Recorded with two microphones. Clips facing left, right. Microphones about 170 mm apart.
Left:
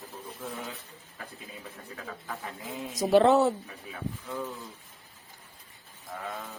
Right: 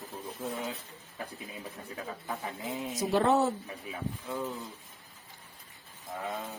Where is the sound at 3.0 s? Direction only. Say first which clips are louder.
Left 5 dB; 70° left (ahead or behind).